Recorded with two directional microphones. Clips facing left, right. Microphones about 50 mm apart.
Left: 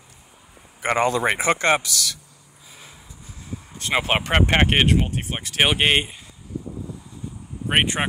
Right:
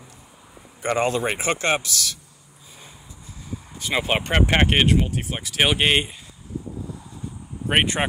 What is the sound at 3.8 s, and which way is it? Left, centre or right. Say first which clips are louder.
Speech: left 1 dB; left.